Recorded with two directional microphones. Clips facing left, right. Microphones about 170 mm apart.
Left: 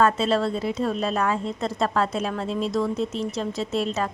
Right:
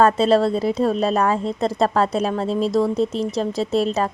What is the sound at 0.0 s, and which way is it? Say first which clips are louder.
Speech: right 5 dB; 35° right (ahead or behind).